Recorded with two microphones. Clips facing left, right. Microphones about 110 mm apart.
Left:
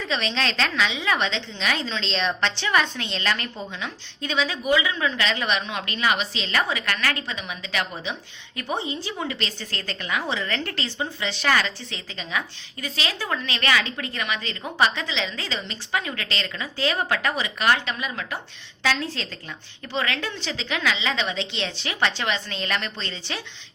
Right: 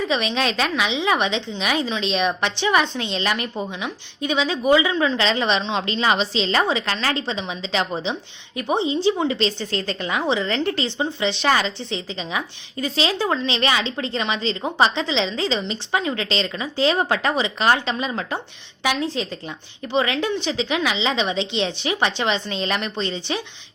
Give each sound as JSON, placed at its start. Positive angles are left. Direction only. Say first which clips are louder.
{"t": 0.0, "sound": "a woman's voice", "louder": "right 4 dB", "side_deg": -15}
{"t": 18.8, "sound": "a woman's voice", "louder": "right 3 dB", "side_deg": -15}